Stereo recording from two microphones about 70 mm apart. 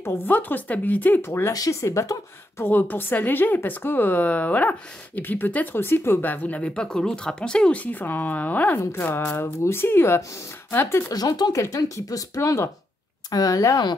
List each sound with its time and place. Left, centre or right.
0.0 s a woman's voice: left
1.2 s speech: left
1.5 s speech: left
1.8 s speech: left
2.6 s a woman's voice: left
6.7 s a woman's voice: centre
8.7 s speech: left
11.1 s speech: left
11.5 s speech: left
12.4 s speech: left
13.3 s speech: left